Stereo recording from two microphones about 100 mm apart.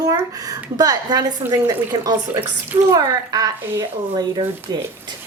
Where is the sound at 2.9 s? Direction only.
40° right (ahead or behind).